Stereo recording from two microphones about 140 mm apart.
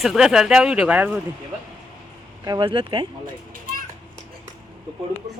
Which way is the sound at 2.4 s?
25° right (ahead or behind).